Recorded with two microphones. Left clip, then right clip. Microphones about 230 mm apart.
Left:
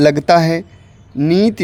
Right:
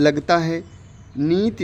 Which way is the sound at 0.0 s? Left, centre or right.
Left.